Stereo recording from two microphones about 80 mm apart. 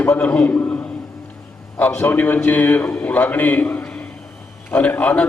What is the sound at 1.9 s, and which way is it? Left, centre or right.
A man's voice, left.